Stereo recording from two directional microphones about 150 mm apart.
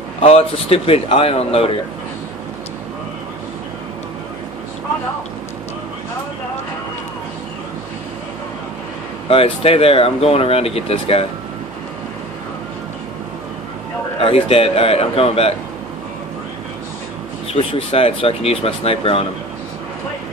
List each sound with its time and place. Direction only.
0.2 s speech: 40° left (ahead or behind)
9.3 s speech: 40° left (ahead or behind)
14.2 s speech: 40° left (ahead or behind)
17.5 s speech: 40° left (ahead or behind)